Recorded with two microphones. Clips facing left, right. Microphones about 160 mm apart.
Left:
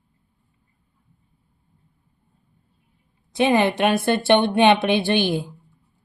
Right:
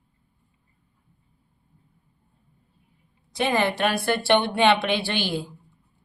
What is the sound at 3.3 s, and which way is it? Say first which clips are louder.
Speech: left 5 dB; 20° left (ahead or behind).